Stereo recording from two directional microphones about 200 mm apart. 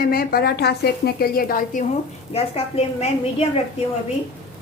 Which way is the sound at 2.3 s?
30° left (ahead or behind).